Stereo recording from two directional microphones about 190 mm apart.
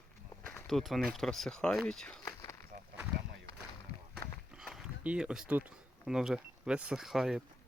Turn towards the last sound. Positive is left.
turn(degrees=0)  # may be behind; listen again after turning